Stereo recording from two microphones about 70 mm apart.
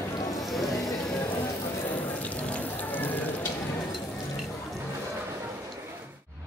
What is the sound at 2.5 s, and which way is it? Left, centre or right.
Rain on surface, left.